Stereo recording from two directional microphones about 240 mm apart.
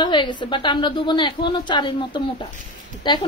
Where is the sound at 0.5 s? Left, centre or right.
Centre.